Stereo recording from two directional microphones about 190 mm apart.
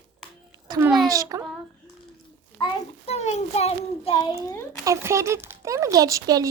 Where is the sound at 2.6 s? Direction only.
15° left (ahead or behind).